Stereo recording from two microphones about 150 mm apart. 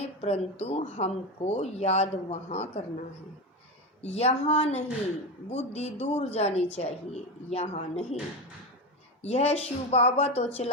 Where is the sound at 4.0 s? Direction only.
45° left (ahead or behind).